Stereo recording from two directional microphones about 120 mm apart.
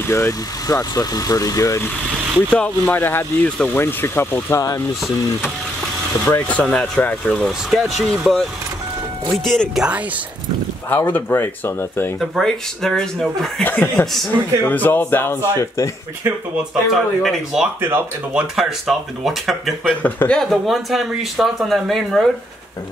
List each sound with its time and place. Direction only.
0.0 s speech: 25° left (ahead or behind)
2.5 s speech: 15° left (ahead or behind)
3.8 s speech: 20° left (ahead or behind)
6.2 s speech: 20° left (ahead or behind)
6.6 s speech: 5° left (ahead or behind)
10.9 s speech: 15° left (ahead or behind)
12.2 s speech: 5° left (ahead or behind)
13.7 s speech: 15° left (ahead or behind)
16.9 s speech: 5° right (ahead or behind)
17.7 s speech: 20° right (ahead or behind)
18.3 s speech: 5° right (ahead or behind)